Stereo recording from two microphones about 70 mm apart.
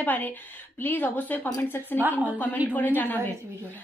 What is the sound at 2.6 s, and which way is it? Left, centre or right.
Speech, right.